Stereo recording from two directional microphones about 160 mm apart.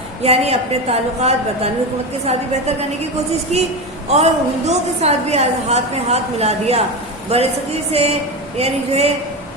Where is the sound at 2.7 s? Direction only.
40° right (ahead or behind).